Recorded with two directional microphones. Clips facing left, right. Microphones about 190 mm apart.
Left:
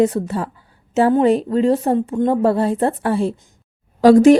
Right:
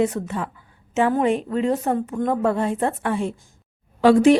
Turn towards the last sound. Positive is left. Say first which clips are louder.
# left 5 dB
turn(degrees=40)  # may be behind; listen again after turning